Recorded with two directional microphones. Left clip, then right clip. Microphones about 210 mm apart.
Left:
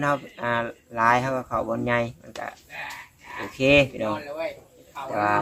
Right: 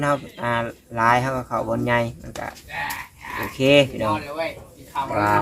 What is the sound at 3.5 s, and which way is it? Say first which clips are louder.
Speech: right 2 dB; 10° left (ahead or behind).